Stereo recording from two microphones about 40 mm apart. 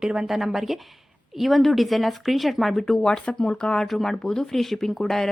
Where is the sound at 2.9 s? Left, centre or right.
Centre.